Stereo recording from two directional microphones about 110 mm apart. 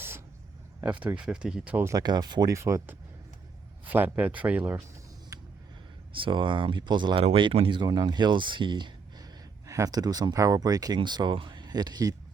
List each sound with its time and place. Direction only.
0.9 s speech: 10° right (ahead or behind)
1.9 s speech: 35° right (ahead or behind)
2.6 s speech: 25° right (ahead or behind)
3.8 s speech: 15° right (ahead or behind)
5.3 s a sound: 30° right (ahead or behind)
6.1 s speech: 50° right (ahead or behind)
9.6 s speech: 30° right (ahead or behind)